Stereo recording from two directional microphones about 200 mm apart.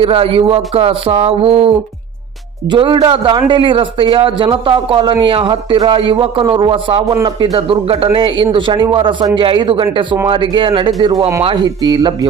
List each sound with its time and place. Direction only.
0.0 s a man's voice: 30° right (ahead or behind)